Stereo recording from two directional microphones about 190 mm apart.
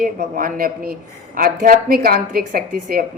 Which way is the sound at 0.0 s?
50° right (ahead or behind).